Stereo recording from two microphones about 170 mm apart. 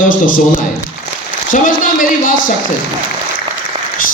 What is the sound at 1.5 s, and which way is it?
Speech, 55° left (ahead or behind).